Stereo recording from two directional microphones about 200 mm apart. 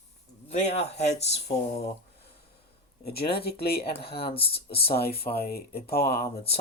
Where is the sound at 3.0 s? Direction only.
50° left (ahead or behind).